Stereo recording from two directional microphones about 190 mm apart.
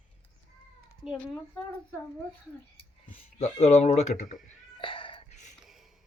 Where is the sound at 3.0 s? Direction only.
35° left (ahead or behind).